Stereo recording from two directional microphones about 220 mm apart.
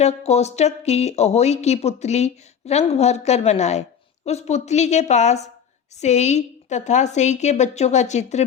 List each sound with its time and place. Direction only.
0.0 s a woman's voice: 30° left (ahead or behind)